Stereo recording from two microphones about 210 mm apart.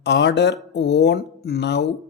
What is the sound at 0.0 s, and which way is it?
A man's voice, 55° left (ahead or behind).